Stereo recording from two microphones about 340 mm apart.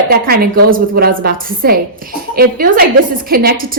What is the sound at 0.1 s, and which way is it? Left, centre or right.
A woman's voice, right.